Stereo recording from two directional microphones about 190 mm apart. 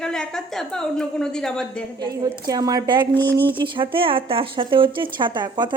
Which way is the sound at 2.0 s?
20° right (ahead or behind).